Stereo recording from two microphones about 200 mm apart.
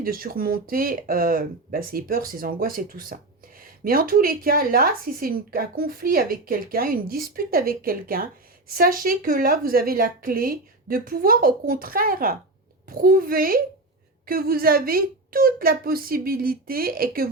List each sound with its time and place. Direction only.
0.0 s speech: 45° right (ahead or behind)